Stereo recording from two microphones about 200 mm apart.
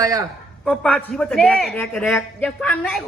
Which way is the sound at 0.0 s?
15° right (ahead or behind).